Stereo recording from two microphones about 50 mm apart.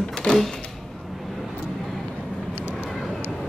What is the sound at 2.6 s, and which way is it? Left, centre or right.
Vehicle, left.